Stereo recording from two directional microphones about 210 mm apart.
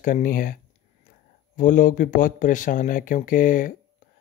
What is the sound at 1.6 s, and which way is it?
Speech, 40° left (ahead or behind).